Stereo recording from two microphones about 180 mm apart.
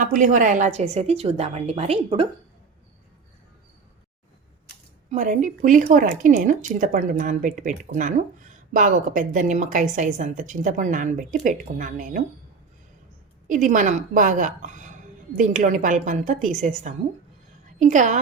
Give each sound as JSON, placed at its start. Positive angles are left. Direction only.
{"t": 0.0, "sound": "a woman's voice", "side_deg": -45}
{"t": 5.1, "sound": "a woman's voice", "side_deg": -45}
{"t": 13.5, "sound": "a woman's voice", "side_deg": -45}